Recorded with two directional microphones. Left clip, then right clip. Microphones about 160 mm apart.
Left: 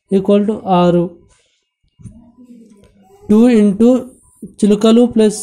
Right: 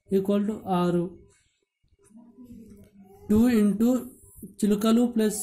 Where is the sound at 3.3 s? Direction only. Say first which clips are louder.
Left 12 dB; 20° left (ahead or behind).